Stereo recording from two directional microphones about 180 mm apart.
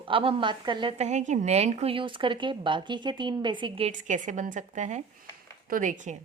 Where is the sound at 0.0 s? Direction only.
30° right (ahead or behind).